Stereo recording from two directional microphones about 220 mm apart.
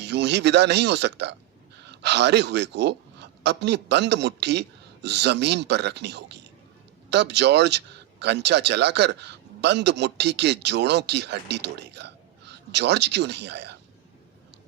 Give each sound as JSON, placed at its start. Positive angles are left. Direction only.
{"t": 0.0, "sound": "speech", "side_deg": -50}